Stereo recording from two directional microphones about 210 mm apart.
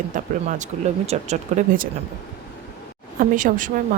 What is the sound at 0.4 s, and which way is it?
Speech, 35° right (ahead or behind).